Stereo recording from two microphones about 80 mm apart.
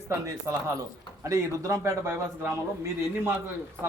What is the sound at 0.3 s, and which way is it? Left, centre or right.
A man's voice, right.